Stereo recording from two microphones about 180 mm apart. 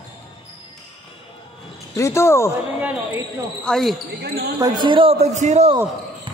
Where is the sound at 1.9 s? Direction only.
15° left (ahead or behind).